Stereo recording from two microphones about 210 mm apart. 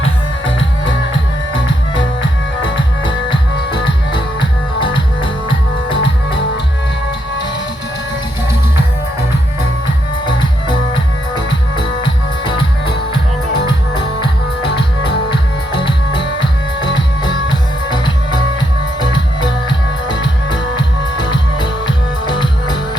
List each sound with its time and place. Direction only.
3.8 s music: 25° left (ahead or behind)
5.9 s music: 60° left (ahead or behind)
14.2 s music: 25° left (ahead or behind)
16.8 s music: 55° left (ahead or behind)
17.5 s music: 20° left (ahead or behind)
19.4 s music: 20° left (ahead or behind)
21.6 s music: 20° left (ahead or behind)